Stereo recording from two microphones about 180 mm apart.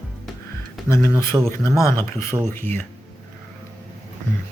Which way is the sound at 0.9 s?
15° left (ahead or behind).